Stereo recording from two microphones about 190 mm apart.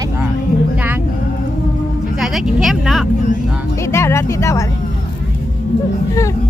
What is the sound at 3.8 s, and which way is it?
Music, 15° left (ahead or behind).